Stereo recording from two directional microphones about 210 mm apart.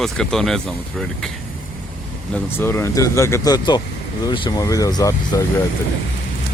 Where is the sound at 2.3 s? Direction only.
10° left (ahead or behind).